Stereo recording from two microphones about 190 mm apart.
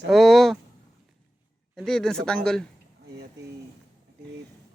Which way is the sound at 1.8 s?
Centre (ahead or behind).